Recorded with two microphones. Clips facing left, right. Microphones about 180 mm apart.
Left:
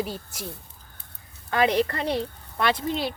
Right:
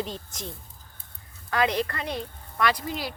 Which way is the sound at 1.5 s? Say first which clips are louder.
Left 3 dB; 25° left (ahead or behind).